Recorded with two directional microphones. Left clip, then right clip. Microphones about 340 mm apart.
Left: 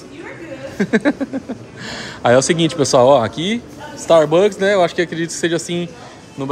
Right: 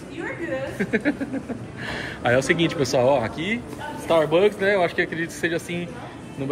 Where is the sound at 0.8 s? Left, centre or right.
Centre.